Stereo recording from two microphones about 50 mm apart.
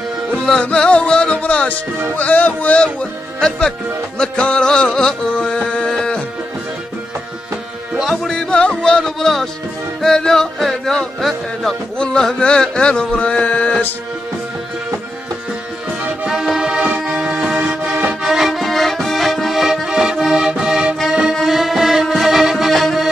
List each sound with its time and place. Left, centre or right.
0.5 s music: centre
2.8 s speech: centre
4.2 s music: centre
8.1 s music: centre
12.0 s music: centre
16.3 s music: centre
18.2 s music: centre
21.1 s accordion: centre
21.5 s music: centre